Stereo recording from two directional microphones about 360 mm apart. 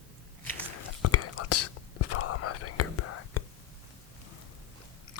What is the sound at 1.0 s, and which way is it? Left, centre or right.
Whispering, left.